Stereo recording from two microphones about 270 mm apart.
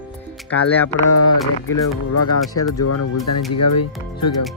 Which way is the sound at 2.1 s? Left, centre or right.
Left.